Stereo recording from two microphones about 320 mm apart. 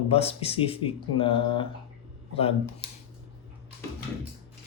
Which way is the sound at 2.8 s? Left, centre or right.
Centre.